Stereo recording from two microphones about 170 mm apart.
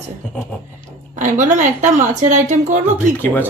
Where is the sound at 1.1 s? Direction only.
50° right (ahead or behind).